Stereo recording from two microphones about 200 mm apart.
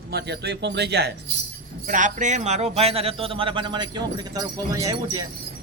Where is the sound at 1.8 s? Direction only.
40° right (ahead or behind); by 5.2 s 15° right (ahead or behind).